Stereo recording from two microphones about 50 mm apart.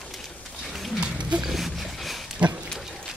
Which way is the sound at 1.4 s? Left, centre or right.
Centre.